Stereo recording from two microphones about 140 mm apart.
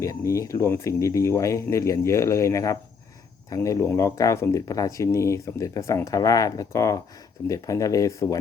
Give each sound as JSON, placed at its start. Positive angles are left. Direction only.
{"t": 0.0, "sound": "speech", "side_deg": 20}